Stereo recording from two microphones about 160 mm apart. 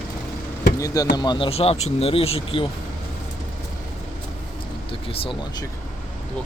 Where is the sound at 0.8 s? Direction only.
20° left (ahead or behind).